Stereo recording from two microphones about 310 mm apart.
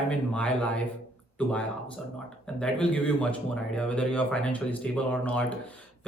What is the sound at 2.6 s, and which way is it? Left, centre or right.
Speech, centre.